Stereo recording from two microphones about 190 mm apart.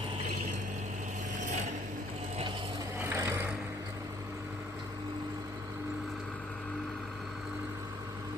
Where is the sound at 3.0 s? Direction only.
15° right (ahead or behind).